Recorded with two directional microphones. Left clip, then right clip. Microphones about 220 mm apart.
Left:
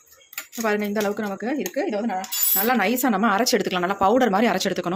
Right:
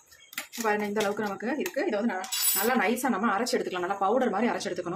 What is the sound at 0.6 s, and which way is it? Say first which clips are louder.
Speech: left 4 dB; 35° left (ahead or behind).